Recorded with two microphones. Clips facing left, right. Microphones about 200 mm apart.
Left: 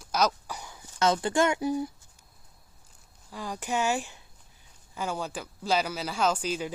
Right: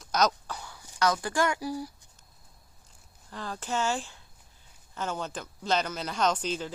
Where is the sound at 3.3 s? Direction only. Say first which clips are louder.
Left 2 dB; 10° left (ahead or behind).